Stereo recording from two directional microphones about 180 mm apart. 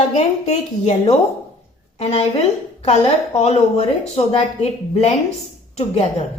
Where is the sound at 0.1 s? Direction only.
40° left (ahead or behind).